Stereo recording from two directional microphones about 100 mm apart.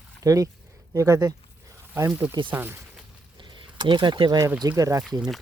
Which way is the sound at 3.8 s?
50° right (ahead or behind).